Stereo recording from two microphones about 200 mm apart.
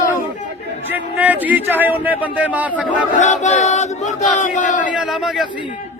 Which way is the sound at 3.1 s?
35° left (ahead or behind).